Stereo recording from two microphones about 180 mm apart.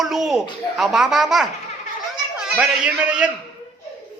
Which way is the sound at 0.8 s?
5° right (ahead or behind).